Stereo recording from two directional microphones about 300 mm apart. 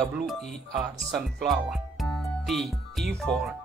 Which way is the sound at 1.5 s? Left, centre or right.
Centre.